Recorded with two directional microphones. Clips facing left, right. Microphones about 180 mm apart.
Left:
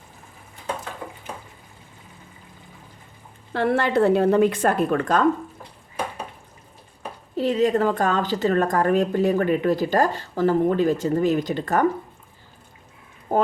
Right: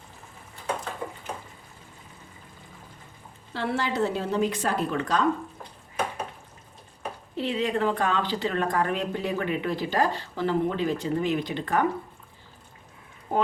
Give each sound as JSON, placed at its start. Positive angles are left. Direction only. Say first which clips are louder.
{"t": 3.5, "sound": "a woman's voice", "louder": "left 8 dB", "side_deg": 55}
{"t": 7.3, "sound": "speech", "louder": "left 7 dB", "side_deg": 40}